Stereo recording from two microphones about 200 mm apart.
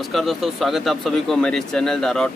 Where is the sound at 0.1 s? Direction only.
Centre (ahead or behind).